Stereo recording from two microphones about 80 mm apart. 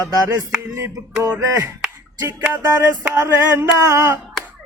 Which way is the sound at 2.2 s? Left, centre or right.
Right.